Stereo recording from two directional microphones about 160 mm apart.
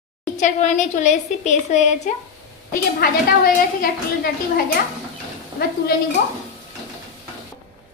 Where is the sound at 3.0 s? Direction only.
70° left (ahead or behind).